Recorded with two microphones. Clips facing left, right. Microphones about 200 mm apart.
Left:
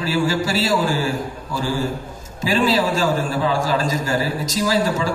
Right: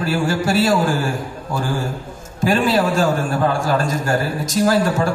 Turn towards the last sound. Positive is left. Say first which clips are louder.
# right 3 dB
turn(degrees=-55)  # may be behind; listen again after turning